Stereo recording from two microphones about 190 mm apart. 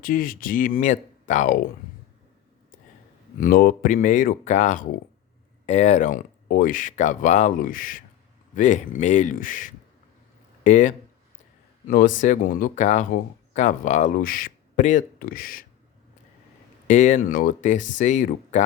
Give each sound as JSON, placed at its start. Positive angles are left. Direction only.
{"t": 0.0, "sound": "speech", "side_deg": 45}
{"t": 3.3, "sound": "speech", "side_deg": 45}
{"t": 16.8, "sound": "speech", "side_deg": 40}